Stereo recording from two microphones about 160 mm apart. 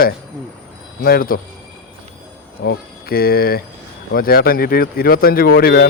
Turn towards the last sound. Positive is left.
turn(degrees=75)  # may be behind; listen again after turning